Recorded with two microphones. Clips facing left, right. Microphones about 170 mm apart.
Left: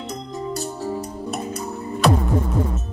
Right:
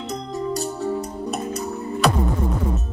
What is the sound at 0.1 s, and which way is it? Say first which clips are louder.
Music: right 4 dB; centre (ahead or behind).